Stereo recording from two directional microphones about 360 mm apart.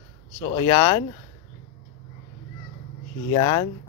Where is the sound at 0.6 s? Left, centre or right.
Centre.